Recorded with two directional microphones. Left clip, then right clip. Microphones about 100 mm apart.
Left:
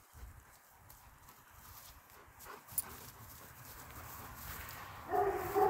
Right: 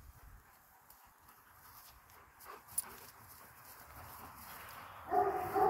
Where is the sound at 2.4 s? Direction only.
5° right (ahead or behind).